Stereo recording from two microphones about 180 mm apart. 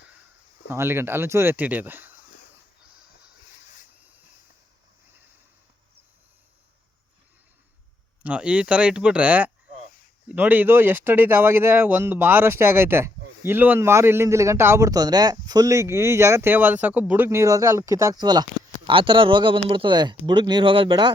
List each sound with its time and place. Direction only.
0.7 s speech: 15° right (ahead or behind)
8.2 s speech: 5° right (ahead or behind); by 21.1 s 25° right (ahead or behind)